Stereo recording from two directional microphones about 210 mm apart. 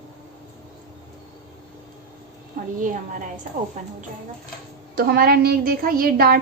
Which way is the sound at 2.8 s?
40° right (ahead or behind).